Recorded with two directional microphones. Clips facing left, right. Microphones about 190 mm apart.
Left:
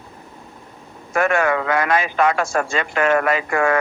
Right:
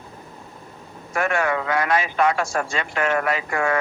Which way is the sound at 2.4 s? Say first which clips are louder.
Left 4 dB; 55° left (ahead or behind).